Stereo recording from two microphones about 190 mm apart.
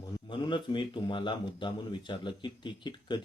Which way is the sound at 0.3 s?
25° left (ahead or behind).